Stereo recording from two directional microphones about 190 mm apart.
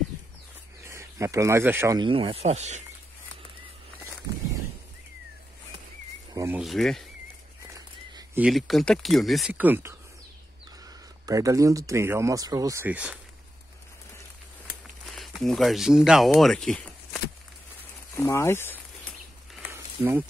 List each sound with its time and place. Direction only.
0.8 s speech: 15° right (ahead or behind)
2.0 s speech: 25° right (ahead or behind)
6.3 s insect: 15° right (ahead or behind)
6.6 s speech: centre (ahead or behind)
8.4 s speech: centre (ahead or behind)
11.2 s speech: 15° right (ahead or behind)
15.1 s speech: centre (ahead or behind)
19.7 s a sound: 15° right (ahead or behind)